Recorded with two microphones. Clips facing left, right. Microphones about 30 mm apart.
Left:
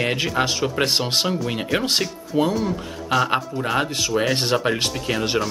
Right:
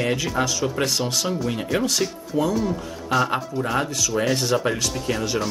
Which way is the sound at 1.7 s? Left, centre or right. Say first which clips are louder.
Left 2 dB; left.